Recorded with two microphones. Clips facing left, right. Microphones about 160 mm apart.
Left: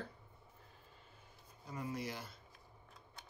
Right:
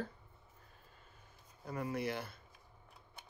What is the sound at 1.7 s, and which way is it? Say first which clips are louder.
Speech: right 4 dB; 60° right (ahead or behind).